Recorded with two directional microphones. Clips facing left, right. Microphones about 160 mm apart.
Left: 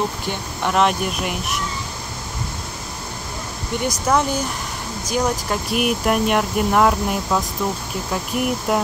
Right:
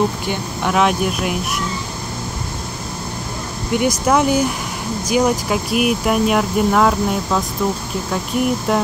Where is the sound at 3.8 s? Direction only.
10° right (ahead or behind).